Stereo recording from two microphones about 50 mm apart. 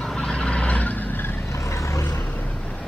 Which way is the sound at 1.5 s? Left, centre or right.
Left.